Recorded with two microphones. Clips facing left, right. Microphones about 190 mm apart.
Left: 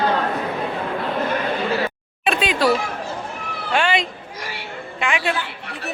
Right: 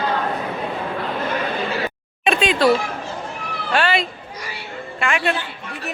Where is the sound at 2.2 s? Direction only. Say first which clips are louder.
Right 2 dB; 5° left (ahead or behind).